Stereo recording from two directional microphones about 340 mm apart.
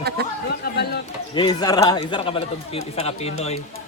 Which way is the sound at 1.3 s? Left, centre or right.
Centre.